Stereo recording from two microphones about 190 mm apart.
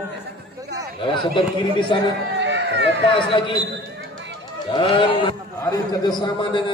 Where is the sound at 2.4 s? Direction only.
65° right (ahead or behind).